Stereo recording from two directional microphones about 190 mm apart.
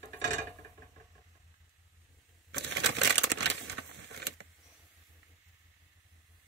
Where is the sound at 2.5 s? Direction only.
70° right (ahead or behind).